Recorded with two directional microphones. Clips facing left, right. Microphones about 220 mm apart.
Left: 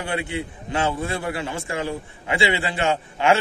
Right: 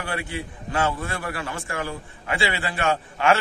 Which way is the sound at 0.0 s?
20° left (ahead or behind).